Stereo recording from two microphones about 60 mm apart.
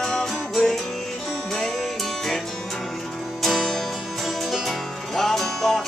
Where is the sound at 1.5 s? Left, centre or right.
Centre.